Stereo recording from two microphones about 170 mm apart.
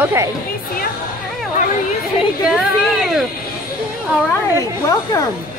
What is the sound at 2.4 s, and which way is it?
Speech, centre (ahead or behind).